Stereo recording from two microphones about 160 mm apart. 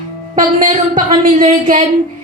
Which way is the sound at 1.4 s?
40° right (ahead or behind).